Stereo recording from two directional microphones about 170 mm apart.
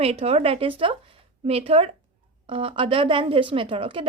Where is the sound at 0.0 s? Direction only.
35° right (ahead or behind).